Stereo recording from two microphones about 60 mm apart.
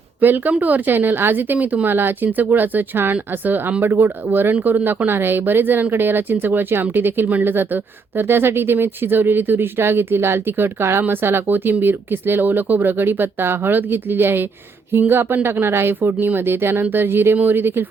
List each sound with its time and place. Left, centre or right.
0.2 s speech: right